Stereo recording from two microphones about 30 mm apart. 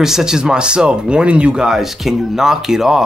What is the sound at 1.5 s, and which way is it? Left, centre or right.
Speech, right.